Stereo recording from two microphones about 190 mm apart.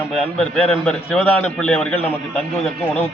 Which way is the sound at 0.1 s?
5° left (ahead or behind).